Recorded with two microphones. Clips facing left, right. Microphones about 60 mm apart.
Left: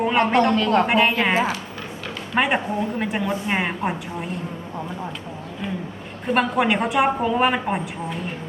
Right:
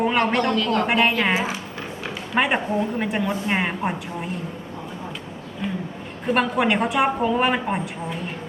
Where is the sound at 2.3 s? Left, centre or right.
Centre.